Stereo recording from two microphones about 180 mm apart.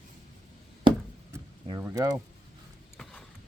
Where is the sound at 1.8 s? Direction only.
20° right (ahead or behind).